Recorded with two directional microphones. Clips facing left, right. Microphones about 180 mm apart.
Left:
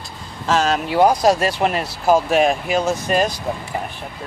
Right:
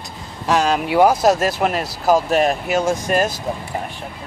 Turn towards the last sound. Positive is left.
turn(degrees=-5)  # may be behind; listen again after turning